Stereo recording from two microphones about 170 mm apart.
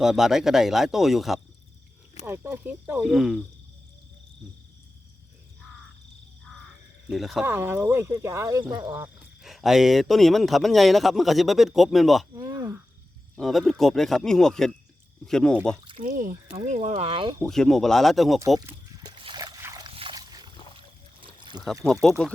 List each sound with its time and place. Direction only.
0.0 s a man's voice: 5° right (ahead or behind)
2.2 s a man's voice: 15° right (ahead or behind)
7.1 s a man's voice: centre (ahead or behind)
7.4 s speech: 15° right (ahead or behind)
9.4 s a man's voice: centre (ahead or behind)
12.3 s a sound: 20° right (ahead or behind)
13.3 s a man's voice: centre (ahead or behind)
16.0 s speech: 50° right (ahead or behind); by 17.3 s 30° right (ahead or behind)
17.4 s a man's voice: centre (ahead or behind)
19.0 s trickle: 25° right (ahead or behind)
19.9 s a sound: 30° right (ahead or behind)
21.8 s speech: 10° left (ahead or behind)